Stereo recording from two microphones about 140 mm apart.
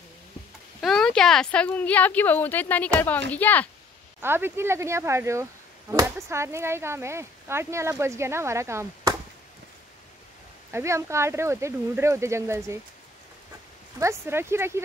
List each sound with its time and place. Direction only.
0.7 s a woman's voice: centre (ahead or behind)
4.2 s speech: 15° right (ahead or behind)
10.7 s speech: 20° right (ahead or behind)
13.9 s speech: 20° right (ahead or behind)